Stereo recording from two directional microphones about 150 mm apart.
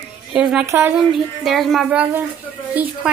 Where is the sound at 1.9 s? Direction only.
10° right (ahead or behind).